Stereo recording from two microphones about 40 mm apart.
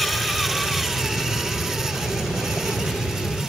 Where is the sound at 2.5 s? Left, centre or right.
Centre.